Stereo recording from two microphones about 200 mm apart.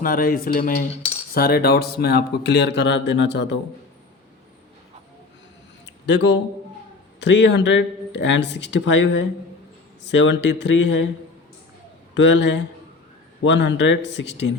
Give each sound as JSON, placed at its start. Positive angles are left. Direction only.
{"t": 0.0, "sound": "speech", "side_deg": 45}
{"t": 6.1, "sound": "speech", "side_deg": 60}
{"t": 12.1, "sound": "speech", "side_deg": 65}